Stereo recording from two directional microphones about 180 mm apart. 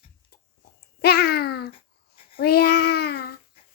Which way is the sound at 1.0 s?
60° left (ahead or behind).